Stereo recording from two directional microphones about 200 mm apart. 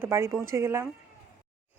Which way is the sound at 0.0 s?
15° right (ahead or behind).